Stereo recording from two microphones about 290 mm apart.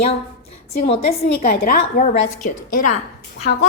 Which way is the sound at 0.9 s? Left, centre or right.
Centre.